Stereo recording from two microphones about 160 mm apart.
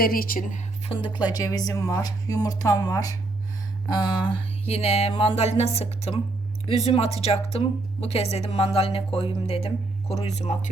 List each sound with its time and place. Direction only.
0.0 s speech: 65° left (ahead or behind)
0.9 s a woman's voice: 30° left (ahead or behind)
3.8 s a sound: 25° left (ahead or behind)